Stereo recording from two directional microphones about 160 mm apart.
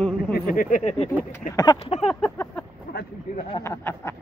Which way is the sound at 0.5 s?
55° left (ahead or behind).